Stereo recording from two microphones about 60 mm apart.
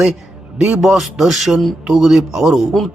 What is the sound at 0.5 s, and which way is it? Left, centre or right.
Speech, centre.